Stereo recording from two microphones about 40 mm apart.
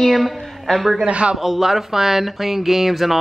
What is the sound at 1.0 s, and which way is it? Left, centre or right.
Speech, right.